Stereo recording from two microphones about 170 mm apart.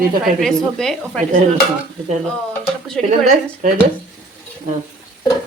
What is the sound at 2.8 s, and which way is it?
Frying, centre (ahead or behind).